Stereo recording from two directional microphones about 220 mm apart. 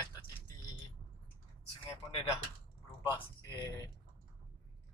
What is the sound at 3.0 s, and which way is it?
Speech, 20° left (ahead or behind).